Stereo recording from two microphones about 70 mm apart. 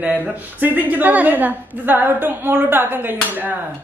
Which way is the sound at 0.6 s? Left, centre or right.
Right.